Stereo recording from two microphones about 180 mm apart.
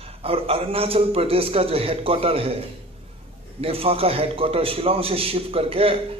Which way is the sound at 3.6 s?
30° right (ahead or behind).